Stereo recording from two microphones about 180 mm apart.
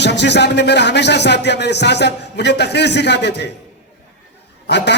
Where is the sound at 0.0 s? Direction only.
70° left (ahead or behind).